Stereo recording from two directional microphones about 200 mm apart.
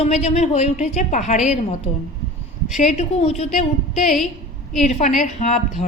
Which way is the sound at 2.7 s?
35° left (ahead or behind).